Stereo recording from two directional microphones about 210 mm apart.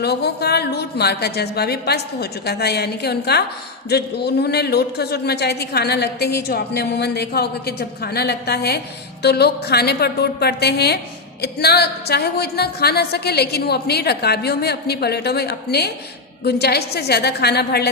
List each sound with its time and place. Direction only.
0.0 s a woman's voice: 50° left (ahead or behind)